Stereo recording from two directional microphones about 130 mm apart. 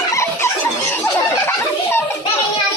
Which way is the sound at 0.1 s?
20° left (ahead or behind).